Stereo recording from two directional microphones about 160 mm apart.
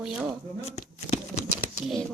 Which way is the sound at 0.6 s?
45° left (ahead or behind).